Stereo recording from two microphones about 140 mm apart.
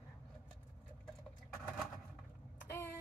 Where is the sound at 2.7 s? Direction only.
15° left (ahead or behind).